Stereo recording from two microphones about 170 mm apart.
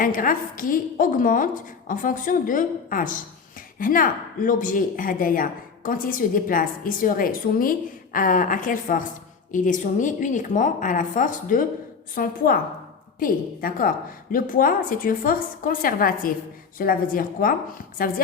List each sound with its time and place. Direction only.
0.0 s a woman's voice: 55° left (ahead or behind)